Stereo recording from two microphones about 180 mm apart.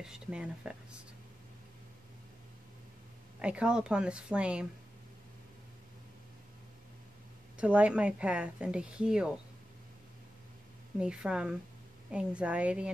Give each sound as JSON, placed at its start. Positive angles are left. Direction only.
{"t": 0.0, "sound": "a woman's voice", "side_deg": -5}
{"t": 3.3, "sound": "a woman's voice", "side_deg": -5}
{"t": 7.5, "sound": "a woman's voice", "side_deg": -5}
{"t": 11.0, "sound": "a woman's voice", "side_deg": -5}